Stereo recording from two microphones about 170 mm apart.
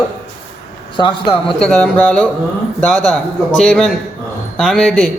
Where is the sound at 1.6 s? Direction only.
5° left (ahead or behind).